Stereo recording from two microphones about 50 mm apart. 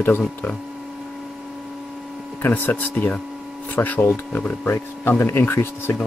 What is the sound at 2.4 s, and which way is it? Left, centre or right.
Speech, left.